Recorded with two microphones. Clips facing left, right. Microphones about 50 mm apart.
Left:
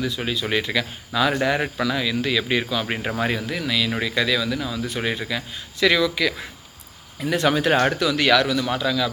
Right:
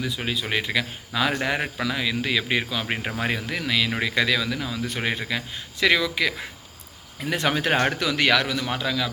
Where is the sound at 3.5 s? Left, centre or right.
Right.